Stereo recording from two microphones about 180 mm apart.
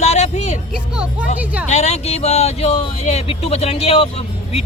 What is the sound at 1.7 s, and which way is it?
Speech, 40° left (ahead or behind).